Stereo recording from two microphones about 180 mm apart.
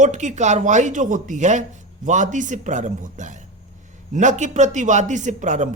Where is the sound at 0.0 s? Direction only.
40° right (ahead or behind).